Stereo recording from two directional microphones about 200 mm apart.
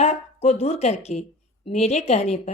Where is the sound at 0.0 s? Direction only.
30° left (ahead or behind).